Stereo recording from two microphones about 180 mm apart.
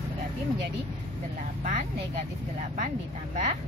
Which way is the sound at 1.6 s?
45° right (ahead or behind).